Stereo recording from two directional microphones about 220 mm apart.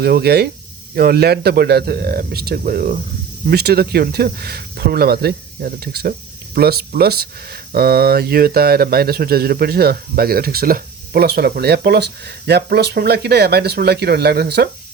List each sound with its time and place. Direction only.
0.0 s speech: 45° right (ahead or behind)